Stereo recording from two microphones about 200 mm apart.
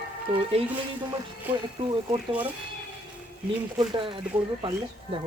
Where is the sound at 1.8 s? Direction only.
25° right (ahead or behind).